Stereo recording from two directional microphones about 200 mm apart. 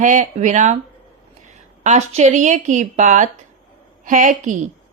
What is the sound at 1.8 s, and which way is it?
Speech, 35° right (ahead or behind).